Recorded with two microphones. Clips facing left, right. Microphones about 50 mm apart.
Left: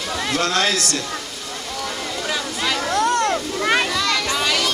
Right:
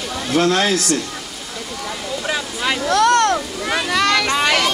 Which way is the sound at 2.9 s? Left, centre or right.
Right.